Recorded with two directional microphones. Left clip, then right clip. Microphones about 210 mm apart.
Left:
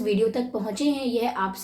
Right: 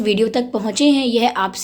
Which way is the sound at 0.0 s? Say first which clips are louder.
Right 6 dB; 40° right (ahead or behind).